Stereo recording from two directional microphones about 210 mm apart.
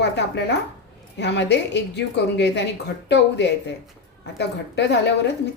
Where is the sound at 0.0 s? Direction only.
55° left (ahead or behind).